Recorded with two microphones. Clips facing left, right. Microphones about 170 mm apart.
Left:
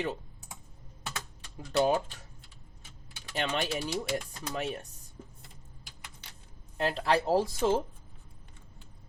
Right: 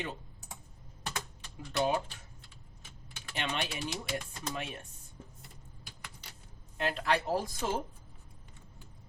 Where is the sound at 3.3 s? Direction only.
40° left (ahead or behind).